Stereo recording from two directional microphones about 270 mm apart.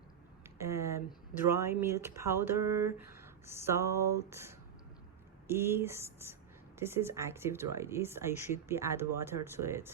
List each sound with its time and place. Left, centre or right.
0.4 s speech: centre